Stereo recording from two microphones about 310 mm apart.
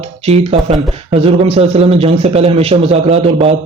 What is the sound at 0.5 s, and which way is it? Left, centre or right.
Speech, centre.